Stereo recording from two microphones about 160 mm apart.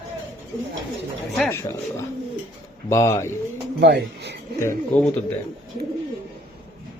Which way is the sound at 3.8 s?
90° right.